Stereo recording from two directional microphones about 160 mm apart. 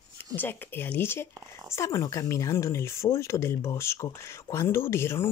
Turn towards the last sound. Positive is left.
turn(degrees=15)  # may be behind; listen again after turning